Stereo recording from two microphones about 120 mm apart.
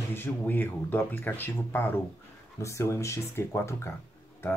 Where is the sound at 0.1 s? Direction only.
15° left (ahead or behind).